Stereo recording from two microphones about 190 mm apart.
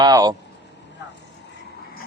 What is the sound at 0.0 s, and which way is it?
Speech, 20° right (ahead or behind).